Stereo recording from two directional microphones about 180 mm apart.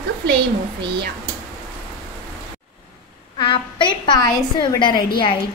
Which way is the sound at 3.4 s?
25° left (ahead or behind).